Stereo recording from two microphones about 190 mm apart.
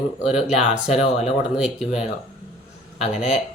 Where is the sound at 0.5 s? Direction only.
5° right (ahead or behind).